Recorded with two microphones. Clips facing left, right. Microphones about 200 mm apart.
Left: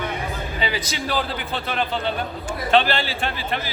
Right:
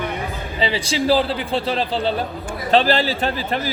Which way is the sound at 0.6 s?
30° right (ahead or behind).